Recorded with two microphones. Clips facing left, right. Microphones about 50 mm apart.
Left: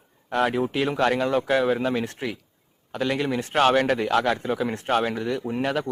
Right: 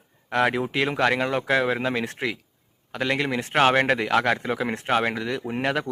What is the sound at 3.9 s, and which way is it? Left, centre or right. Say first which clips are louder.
Speech: even; right.